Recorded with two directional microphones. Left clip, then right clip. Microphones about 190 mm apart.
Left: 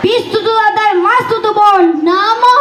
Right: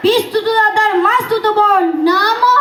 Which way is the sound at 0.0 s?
30° right (ahead or behind).